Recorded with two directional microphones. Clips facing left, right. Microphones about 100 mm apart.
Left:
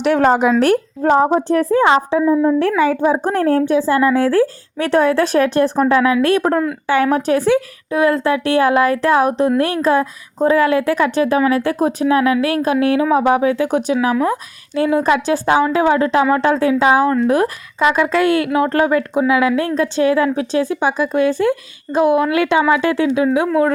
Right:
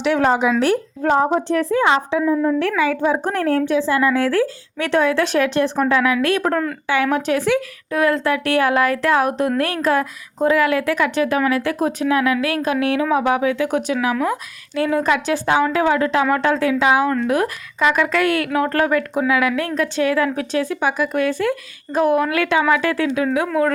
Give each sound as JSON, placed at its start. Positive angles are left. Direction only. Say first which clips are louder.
{"t": 0.0, "sound": "speech", "louder": "left 3 dB", "side_deg": 50}
{"t": 1.0, "sound": "a woman's voice", "louder": "left 3 dB", "side_deg": 30}
{"t": 2.2, "sound": "a woman's voice", "louder": "left 4 dB", "side_deg": 20}
{"t": 2.6, "sound": "a woman's voice", "louder": "left 4 dB", "side_deg": 40}